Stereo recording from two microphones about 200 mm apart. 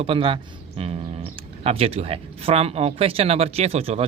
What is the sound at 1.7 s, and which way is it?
Speech, 30° right (ahead or behind).